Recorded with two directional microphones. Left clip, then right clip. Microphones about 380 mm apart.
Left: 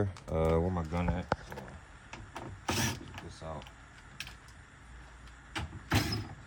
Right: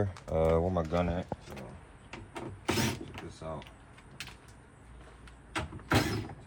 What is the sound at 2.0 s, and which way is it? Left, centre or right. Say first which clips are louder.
Power windows: right 2 dB; centre.